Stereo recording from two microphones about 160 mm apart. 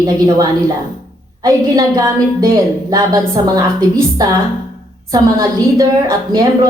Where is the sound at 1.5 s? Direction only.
20° right (ahead or behind).